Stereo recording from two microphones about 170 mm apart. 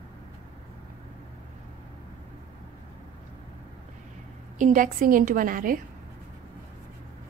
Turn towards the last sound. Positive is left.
turn(degrees=-55)  # may be behind; listen again after turning